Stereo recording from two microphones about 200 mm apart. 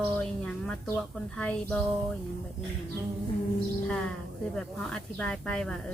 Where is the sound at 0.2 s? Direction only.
5° left (ahead or behind).